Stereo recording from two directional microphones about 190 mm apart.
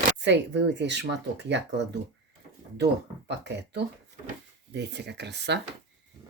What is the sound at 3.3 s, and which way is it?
Speech, 65° right (ahead or behind).